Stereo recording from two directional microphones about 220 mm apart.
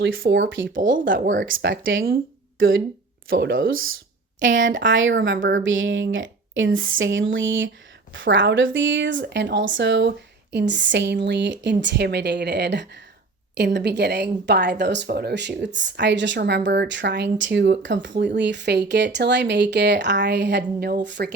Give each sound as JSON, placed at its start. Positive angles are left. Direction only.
{"t": 0.2, "sound": "speech", "side_deg": -55}
{"t": 0.7, "sound": "speech", "side_deg": -35}
{"t": 1.5, "sound": "speech", "side_deg": -55}